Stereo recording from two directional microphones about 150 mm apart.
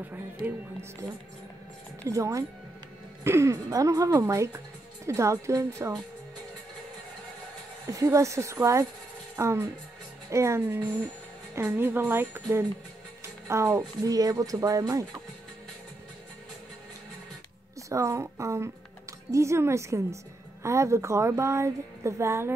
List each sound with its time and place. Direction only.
0.1 s speech: 15° right (ahead or behind)
2.0 s a woman's voice: 20° right (ahead or behind)
7.9 s a woman's voice: 20° right (ahead or behind)
17.8 s a woman's voice: 20° right (ahead or behind)